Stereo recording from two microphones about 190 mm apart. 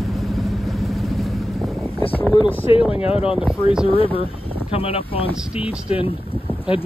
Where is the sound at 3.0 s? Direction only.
30° left (ahead or behind).